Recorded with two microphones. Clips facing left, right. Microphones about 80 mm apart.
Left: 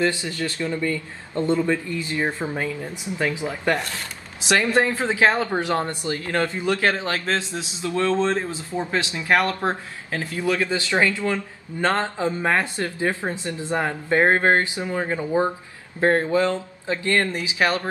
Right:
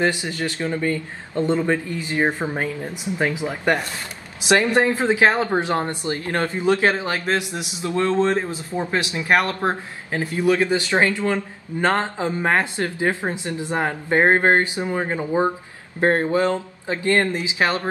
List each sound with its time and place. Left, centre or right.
0.0 s speech: right